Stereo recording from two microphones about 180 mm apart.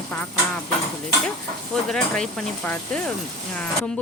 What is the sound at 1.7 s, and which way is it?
Speech, 5° left (ahead or behind).